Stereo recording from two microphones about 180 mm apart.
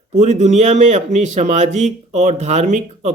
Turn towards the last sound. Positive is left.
turn(degrees=-40)  # may be behind; listen again after turning